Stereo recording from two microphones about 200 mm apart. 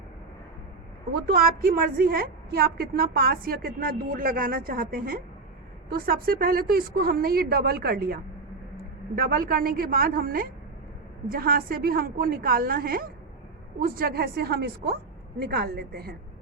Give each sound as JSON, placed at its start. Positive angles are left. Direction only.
{"t": 1.1, "sound": "a woman's voice", "side_deg": -45}